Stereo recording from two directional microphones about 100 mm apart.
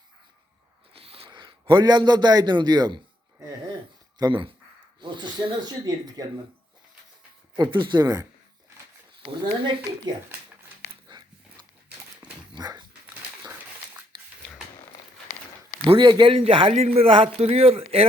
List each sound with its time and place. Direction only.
0.9 s a sound: 75° right (ahead or behind)
1.3 s a man's voice: 50° right (ahead or behind)
4.2 s speech: 55° right (ahead or behind)
7.5 s speech: 50° right (ahead or behind)
9.3 s speech: 50° right (ahead or behind)
11.1 s dog: 50° right (ahead or behind)
16.0 s a man's voice: 50° right (ahead or behind); by 18.1 s 75° right (ahead or behind)